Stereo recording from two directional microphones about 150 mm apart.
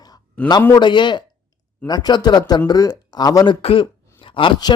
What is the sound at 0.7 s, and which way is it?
Speech, 30° left (ahead or behind).